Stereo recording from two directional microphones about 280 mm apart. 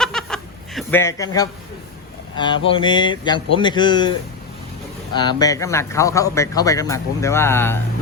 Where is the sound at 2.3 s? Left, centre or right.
Centre.